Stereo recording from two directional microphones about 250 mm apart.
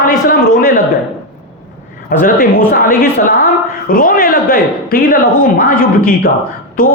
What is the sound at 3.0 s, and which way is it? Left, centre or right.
A man's voice, left.